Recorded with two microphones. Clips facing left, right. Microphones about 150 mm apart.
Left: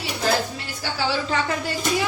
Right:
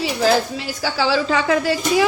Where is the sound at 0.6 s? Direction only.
90° right.